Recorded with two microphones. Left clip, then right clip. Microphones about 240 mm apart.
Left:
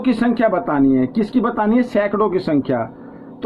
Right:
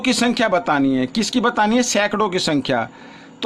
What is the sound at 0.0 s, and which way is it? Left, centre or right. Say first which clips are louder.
A man's voice: left 1 dB; right.